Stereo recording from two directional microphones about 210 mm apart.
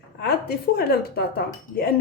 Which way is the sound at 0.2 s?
50° left (ahead or behind).